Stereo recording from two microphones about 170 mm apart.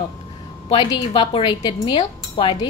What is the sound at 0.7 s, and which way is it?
A woman's voice, 30° left (ahead or behind).